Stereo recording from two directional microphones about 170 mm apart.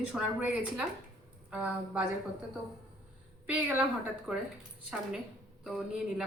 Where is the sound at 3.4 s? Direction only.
10° right (ahead or behind).